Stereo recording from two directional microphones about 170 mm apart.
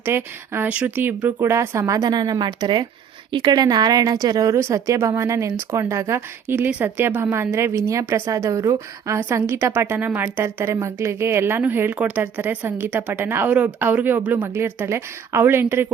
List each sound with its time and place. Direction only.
0.0 s a woman's voice: 15° right (ahead or behind)